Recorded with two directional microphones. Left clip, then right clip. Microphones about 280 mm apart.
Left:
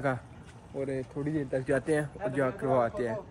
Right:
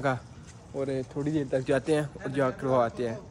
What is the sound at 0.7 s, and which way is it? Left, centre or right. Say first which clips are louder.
Speech: right 3 dB; centre.